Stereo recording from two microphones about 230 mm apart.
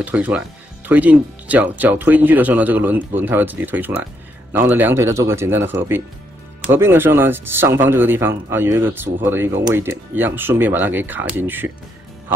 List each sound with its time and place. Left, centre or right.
0.0 s speech: centre